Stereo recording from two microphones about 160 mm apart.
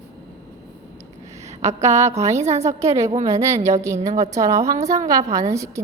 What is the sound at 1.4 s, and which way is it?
A woman's voice, 45° right (ahead or behind).